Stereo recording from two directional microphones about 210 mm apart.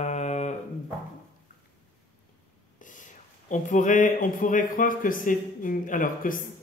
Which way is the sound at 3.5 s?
35° left (ahead or behind).